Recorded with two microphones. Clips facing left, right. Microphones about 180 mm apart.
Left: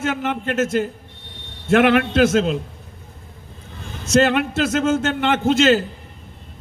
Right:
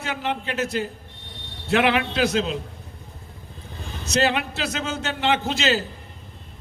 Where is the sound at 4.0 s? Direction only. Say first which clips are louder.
Left 6 dB; 50° left (ahead or behind).